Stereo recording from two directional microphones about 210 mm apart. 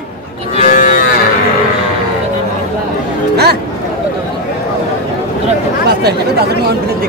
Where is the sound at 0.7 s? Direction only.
40° left (ahead or behind).